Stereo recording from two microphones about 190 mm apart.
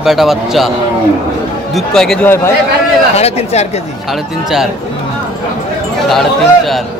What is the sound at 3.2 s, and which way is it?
Speech, 35° left (ahead or behind).